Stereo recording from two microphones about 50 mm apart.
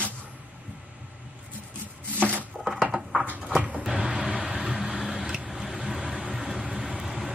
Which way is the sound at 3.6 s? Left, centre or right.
Right.